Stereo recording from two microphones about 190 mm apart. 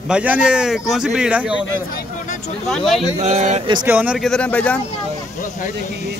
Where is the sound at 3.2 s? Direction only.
40° right (ahead or behind).